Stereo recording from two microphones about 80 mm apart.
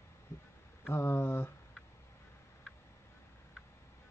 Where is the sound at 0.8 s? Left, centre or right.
Left.